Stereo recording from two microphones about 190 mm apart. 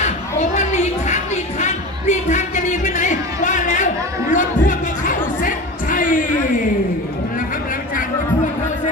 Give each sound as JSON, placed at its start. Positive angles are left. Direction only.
{"t": 0.0, "sound": "music", "side_deg": 40}